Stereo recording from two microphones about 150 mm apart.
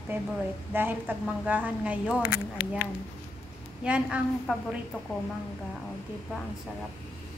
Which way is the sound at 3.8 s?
5° right (ahead or behind).